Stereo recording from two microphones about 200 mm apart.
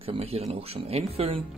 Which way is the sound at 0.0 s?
30° right (ahead or behind).